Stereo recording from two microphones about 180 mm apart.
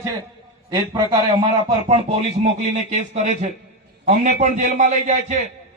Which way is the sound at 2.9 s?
35° right (ahead or behind).